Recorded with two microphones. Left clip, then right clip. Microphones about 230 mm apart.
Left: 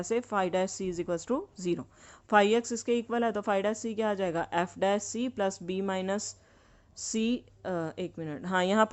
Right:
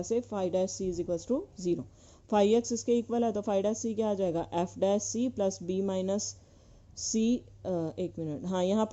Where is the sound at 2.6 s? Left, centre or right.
Left.